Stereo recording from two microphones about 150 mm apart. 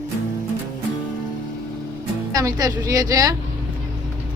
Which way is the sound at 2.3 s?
25° right (ahead or behind).